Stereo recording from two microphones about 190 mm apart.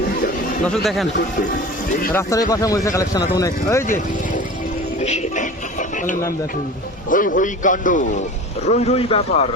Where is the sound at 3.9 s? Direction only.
45° left (ahead or behind).